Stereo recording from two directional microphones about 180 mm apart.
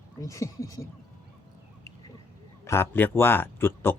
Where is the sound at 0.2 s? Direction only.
15° left (ahead or behind).